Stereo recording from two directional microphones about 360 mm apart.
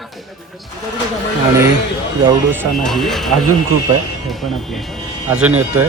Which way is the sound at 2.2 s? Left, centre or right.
Centre.